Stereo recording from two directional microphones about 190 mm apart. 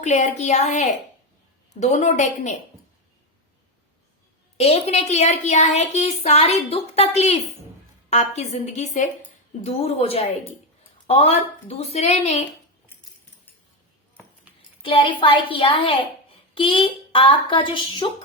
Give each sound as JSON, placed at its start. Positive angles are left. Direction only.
{"t": 0.0, "sound": "a woman's voice", "side_deg": 40}
{"t": 4.5, "sound": "a woman's voice", "side_deg": 35}
{"t": 14.8, "sound": "speech", "side_deg": 25}